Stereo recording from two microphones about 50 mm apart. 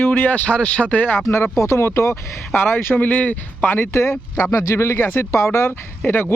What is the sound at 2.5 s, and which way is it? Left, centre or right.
Speech, left.